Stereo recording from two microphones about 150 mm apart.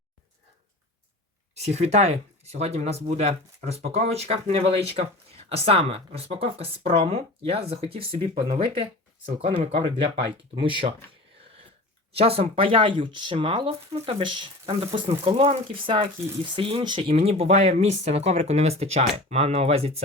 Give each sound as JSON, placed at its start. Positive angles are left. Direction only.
{"t": 1.5, "sound": "speech", "side_deg": -45}
{"t": 12.1, "sound": "speech", "side_deg": -40}